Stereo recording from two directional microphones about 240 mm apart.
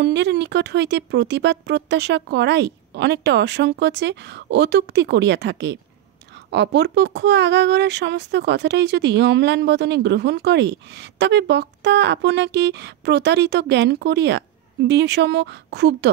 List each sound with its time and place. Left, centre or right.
0.0 s speech: right